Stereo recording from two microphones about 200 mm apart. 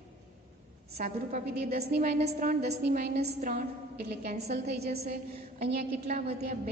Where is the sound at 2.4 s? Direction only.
40° right (ahead or behind).